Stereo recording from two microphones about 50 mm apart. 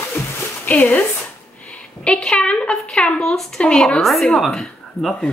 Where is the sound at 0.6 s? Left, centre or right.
Left.